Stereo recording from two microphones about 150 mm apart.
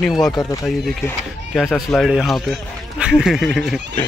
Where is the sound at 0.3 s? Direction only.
25° left (ahead or behind).